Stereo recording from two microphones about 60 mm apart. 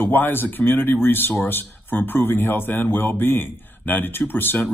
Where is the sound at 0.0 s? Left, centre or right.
Left.